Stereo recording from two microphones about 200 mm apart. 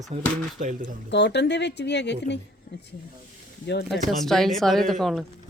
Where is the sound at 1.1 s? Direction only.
60° left (ahead or behind).